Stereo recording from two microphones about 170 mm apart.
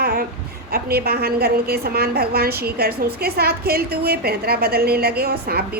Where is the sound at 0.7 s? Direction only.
65° right (ahead or behind).